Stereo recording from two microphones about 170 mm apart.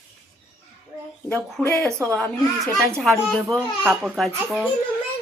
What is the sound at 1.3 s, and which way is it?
A child's voice, 5° left (ahead or behind).